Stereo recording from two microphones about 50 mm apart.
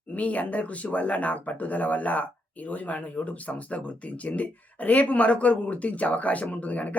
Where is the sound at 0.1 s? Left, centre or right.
Left.